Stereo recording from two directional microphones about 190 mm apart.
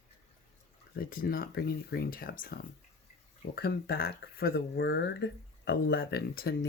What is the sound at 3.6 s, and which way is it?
Speech, 55° left (ahead or behind).